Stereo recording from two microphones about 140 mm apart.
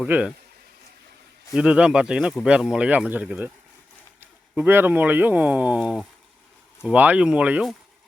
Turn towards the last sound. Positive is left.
turn(degrees=-5)  # may be behind; listen again after turning